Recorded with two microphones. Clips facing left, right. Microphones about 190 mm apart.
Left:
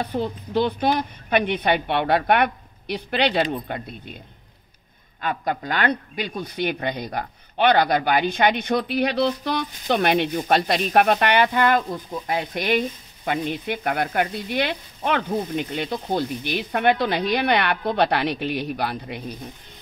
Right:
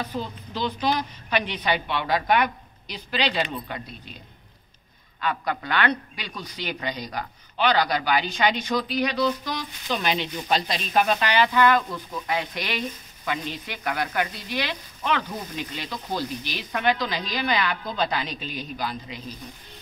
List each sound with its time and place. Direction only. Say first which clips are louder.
0.0 s speech: left 5 dB; 60° left (ahead or behind)
5.2 s speech: left 2 dB; 45° left (ahead or behind); by 19.3 s 60° left (ahead or behind)